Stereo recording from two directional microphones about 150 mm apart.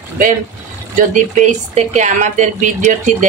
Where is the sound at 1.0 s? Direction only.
50° right (ahead or behind).